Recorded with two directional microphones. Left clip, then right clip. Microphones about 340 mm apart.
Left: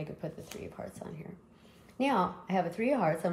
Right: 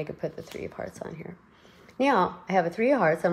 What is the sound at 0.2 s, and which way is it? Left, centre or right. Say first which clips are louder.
A woman's voice: right 8 dB; right.